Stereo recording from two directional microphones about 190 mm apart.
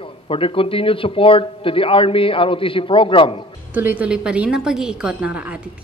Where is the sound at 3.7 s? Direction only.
10° right (ahead or behind).